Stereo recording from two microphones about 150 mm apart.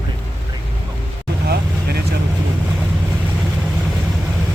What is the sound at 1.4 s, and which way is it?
Vehicle, 90° right.